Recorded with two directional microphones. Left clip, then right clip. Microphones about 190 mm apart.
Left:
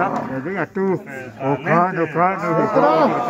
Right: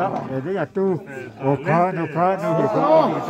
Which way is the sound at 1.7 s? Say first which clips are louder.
Left 3 dB; 45° right (ahead or behind).